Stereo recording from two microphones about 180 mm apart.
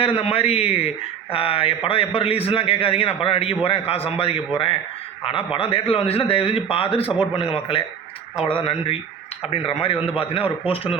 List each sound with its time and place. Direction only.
0.0 s a man's voice: 35° left (ahead or behind)